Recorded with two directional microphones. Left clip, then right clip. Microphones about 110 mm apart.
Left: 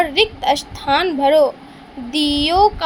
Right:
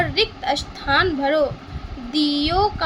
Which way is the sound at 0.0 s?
50° left (ahead or behind).